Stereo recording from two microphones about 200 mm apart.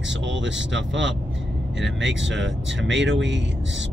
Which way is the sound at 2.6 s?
65° right (ahead or behind).